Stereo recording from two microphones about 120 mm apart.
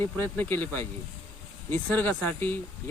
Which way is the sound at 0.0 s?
15° left (ahead or behind).